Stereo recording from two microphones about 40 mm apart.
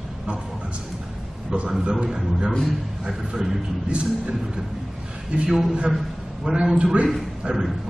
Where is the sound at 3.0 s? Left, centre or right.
Centre.